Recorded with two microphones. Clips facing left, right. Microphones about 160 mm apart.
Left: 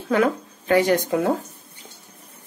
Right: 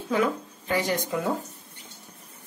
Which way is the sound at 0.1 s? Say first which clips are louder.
Left 5 dB; 70° left (ahead or behind).